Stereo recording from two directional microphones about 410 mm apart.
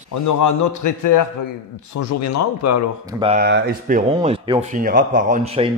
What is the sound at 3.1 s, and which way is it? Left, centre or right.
Speech, centre.